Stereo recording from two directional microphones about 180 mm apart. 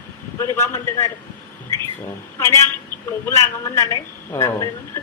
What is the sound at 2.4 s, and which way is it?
A woman's voice, 15° left (ahead or behind).